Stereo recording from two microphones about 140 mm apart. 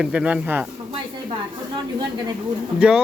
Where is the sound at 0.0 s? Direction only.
5° right (ahead or behind).